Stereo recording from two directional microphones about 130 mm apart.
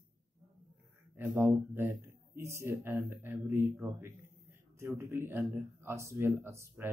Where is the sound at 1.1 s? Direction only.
15° right (ahead or behind).